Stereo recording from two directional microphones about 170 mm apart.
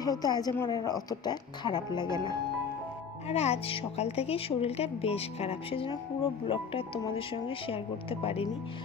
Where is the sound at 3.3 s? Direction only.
40° left (ahead or behind).